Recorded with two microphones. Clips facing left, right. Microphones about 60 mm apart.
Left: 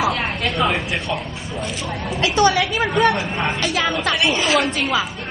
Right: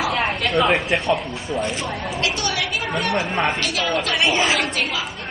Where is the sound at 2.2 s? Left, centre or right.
Left.